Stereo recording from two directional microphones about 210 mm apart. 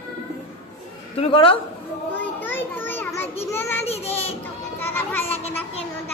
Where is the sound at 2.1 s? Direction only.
10° left (ahead or behind).